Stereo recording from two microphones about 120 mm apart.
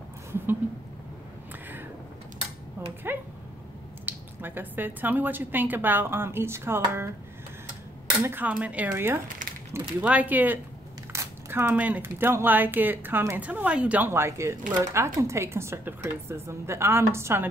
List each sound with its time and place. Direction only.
3.1 s a woman's voice: 20° right (ahead or behind)
8.2 s speech: 15° right (ahead or behind)
9.4 s mechanisms: 90° right
10.0 s a woman's voice: 15° right (ahead or behind)